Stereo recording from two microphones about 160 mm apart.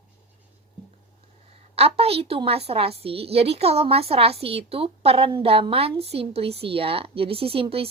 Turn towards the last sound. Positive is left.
turn(degrees=-35)  # may be behind; listen again after turning